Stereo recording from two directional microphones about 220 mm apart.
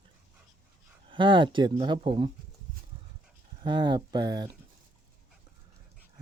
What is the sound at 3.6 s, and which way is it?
Speech, 20° right (ahead or behind).